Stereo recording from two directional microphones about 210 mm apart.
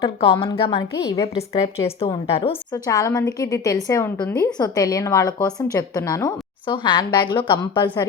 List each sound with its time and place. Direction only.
0.0 s a woman's voice: 25° left (ahead or behind)
1.2 s a woman's voice: 30° left (ahead or behind)